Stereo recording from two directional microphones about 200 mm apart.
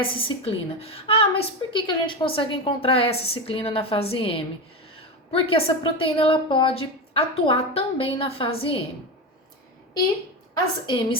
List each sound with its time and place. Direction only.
0.0 s a woman's voice: 25° left (ahead or behind)
10.8 s a woman's voice: 25° left (ahead or behind)